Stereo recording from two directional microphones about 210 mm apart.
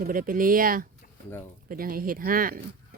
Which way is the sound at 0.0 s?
40° right (ahead or behind).